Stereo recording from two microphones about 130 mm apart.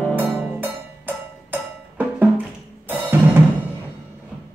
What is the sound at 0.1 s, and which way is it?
Music, 15° right (ahead or behind).